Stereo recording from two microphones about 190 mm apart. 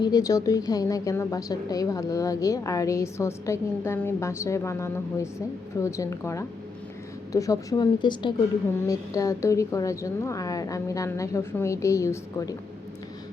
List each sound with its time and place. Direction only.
0.0 s a woman's voice: 20° left (ahead or behind)